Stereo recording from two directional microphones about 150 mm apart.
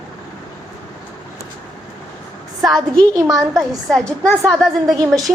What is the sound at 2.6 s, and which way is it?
A woman's voice, 5° left (ahead or behind).